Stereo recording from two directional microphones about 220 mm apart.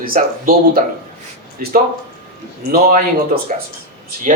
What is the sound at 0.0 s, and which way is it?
Speech, 40° right (ahead or behind).